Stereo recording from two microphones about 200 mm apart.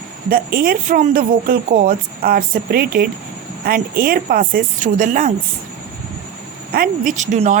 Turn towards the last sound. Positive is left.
turn(degrees=-35)  # may be behind; listen again after turning